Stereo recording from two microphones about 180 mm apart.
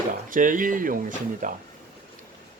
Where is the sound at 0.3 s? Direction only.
50° right (ahead or behind).